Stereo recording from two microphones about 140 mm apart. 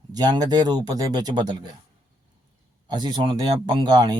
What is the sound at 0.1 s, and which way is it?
Speech, 25° right (ahead or behind).